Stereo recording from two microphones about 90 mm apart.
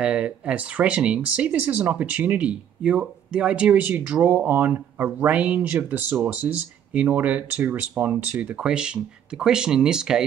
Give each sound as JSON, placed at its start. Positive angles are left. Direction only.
{"t": 0.0, "sound": "speech", "side_deg": -10}